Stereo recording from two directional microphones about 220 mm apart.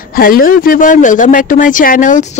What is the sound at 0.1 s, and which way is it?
Speech, 40° left (ahead or behind).